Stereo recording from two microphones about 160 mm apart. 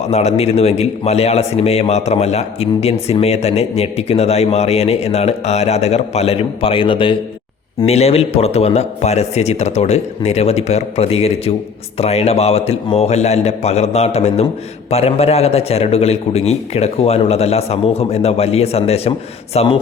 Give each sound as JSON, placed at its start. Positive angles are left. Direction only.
{"t": 0.0, "sound": "a man's voice", "side_deg": 45}